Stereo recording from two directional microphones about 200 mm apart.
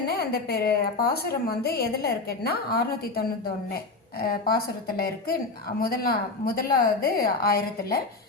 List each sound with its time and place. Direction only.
0.2 s a woman's voice: 50° left (ahead or behind)